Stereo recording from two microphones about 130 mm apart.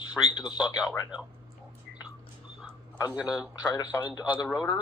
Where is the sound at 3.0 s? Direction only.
10° right (ahead or behind).